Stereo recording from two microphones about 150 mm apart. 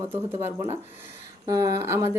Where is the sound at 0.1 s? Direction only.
15° right (ahead or behind).